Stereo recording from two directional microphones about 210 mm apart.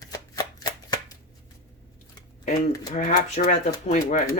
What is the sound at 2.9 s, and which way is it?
Speech, 35° left (ahead or behind).